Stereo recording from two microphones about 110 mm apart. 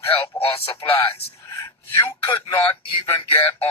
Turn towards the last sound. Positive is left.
turn(degrees=60)  # may be behind; listen again after turning